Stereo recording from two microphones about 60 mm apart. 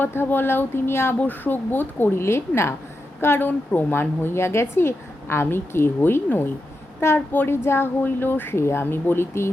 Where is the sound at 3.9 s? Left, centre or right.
Left.